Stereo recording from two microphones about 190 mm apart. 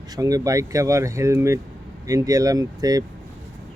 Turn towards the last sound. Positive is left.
turn(degrees=-20)  # may be behind; listen again after turning